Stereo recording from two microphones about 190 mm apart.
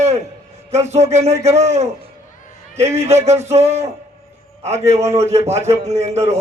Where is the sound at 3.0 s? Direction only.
35° right (ahead or behind).